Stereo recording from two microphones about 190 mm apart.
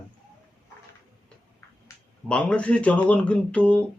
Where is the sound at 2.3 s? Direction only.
5° left (ahead or behind).